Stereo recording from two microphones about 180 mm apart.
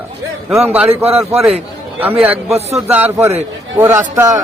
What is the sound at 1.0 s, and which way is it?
Speech, 35° right (ahead or behind).